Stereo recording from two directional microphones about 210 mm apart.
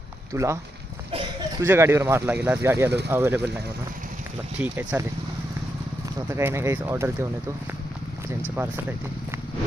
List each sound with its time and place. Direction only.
0.3 s speech: 15° right (ahead or behind)
1.6 s speech: 10° right (ahead or behind)
4.5 s speech: 5° right (ahead or behind)
6.3 s speech: 10° right (ahead or behind)
8.5 s speech: 10° right (ahead or behind)